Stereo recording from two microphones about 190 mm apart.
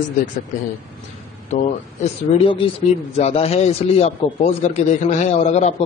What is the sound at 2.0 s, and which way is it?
A man's voice, 30° left (ahead or behind).